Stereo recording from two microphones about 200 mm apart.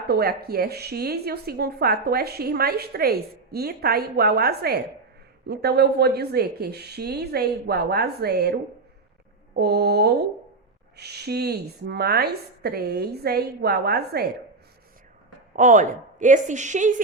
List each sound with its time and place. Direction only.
0.1 s a woman's voice: 50° right (ahead or behind)
9.6 s a woman's voice: 55° right (ahead or behind)
15.5 s a woman's voice: 40° right (ahead or behind)